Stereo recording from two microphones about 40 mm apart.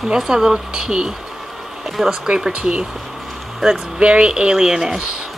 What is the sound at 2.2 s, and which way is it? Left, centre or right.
Speech, right.